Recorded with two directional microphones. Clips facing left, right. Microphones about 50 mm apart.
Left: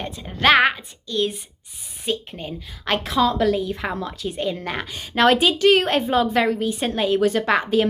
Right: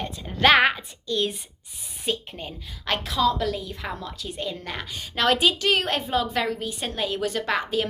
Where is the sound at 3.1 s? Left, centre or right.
Left.